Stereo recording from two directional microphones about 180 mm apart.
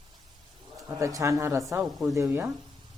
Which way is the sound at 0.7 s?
15° right (ahead or behind).